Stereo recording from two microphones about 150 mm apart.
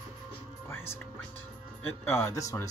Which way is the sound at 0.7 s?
15° left (ahead or behind).